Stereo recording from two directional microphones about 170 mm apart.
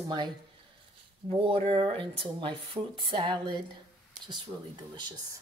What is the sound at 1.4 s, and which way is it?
Speech, 35° right (ahead or behind).